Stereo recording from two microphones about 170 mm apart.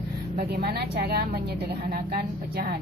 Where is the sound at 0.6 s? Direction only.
70° right (ahead or behind).